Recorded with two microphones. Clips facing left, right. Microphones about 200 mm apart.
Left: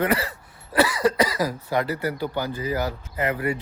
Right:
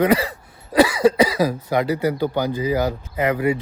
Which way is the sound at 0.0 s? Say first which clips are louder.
Right 6 dB; 15° right (ahead or behind).